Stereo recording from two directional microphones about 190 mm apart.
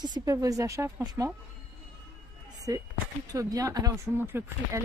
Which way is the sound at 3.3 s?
20° right (ahead or behind).